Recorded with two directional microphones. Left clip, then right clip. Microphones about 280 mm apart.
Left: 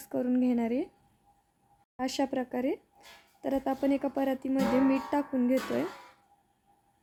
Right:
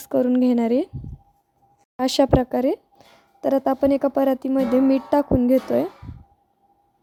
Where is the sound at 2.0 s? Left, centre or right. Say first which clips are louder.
Right 13 dB; right.